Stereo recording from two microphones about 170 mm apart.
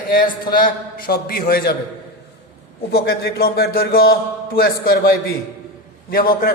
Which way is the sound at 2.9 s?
70° left (ahead or behind).